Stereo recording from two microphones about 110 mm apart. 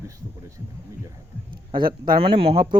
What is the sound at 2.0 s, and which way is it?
Speech, 55° right (ahead or behind).